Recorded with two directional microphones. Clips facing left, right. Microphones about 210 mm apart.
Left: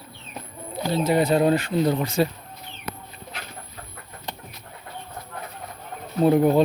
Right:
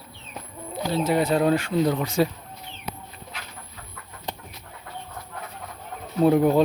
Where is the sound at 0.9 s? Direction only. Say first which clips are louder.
Left 2 dB; 5° right (ahead or behind).